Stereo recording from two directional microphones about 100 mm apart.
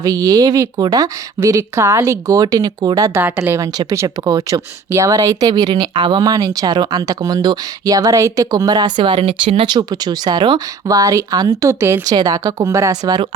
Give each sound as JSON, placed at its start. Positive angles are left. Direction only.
{"t": 0.0, "sound": "speech", "side_deg": -35}
{"t": 3.2, "sound": "a woman's voice", "side_deg": -20}
{"t": 10.8, "sound": "speech", "side_deg": -35}